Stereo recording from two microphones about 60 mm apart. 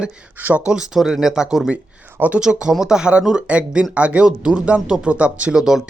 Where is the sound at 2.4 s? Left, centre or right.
Centre.